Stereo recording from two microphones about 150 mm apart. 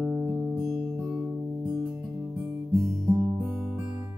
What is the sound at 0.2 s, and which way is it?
Music, 20° right (ahead or behind).